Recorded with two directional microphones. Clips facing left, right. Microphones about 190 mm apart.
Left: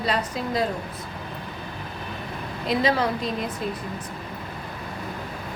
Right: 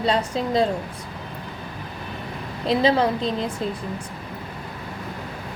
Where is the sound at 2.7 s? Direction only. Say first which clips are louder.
Right 4 dB; 30° right (ahead or behind).